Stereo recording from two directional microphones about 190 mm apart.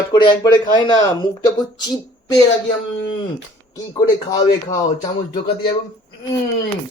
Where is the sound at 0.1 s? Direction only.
25° left (ahead or behind).